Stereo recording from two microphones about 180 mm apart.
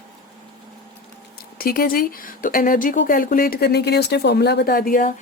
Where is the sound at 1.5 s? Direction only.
55° left (ahead or behind).